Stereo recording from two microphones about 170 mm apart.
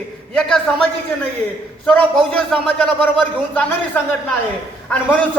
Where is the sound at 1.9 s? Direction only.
5° left (ahead or behind).